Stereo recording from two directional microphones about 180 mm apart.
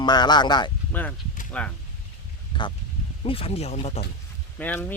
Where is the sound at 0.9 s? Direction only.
10° left (ahead or behind).